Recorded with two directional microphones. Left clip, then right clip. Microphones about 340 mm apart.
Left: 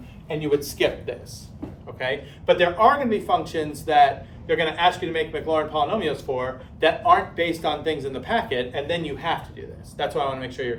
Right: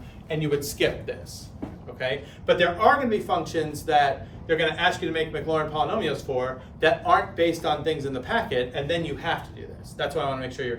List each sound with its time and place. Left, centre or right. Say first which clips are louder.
0.3 s a man's voice: left 3 dB; centre